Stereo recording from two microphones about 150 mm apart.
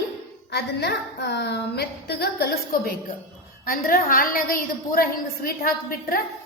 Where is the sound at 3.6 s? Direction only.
70° left (ahead or behind).